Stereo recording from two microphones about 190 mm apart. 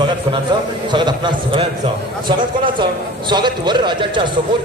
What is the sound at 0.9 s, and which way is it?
Speech, 25° right (ahead or behind).